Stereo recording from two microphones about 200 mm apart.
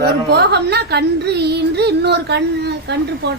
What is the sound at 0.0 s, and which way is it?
Speech, 55° right (ahead or behind).